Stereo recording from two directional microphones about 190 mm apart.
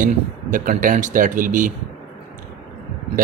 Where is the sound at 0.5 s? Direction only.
45° right (ahead or behind).